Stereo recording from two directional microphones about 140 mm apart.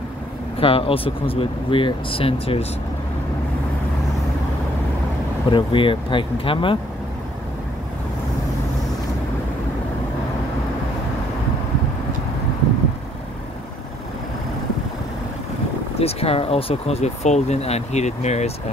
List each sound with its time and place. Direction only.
0.6 s speech: 40° left (ahead or behind)
5.5 s speech: 35° left (ahead or behind)
16.0 s speech: 45° left (ahead or behind)